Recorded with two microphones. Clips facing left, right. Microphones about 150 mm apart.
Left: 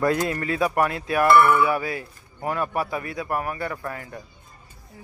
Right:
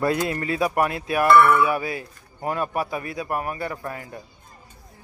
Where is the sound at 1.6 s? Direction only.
20° right (ahead or behind).